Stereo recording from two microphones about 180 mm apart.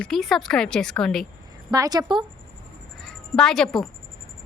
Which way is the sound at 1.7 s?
20° right (ahead or behind).